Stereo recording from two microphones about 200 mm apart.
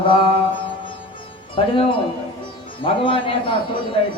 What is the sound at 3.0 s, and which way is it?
Speech, 25° left (ahead or behind).